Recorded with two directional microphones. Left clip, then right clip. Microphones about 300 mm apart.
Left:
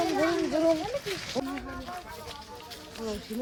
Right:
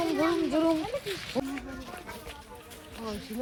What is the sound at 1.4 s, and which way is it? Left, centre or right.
Speech, right.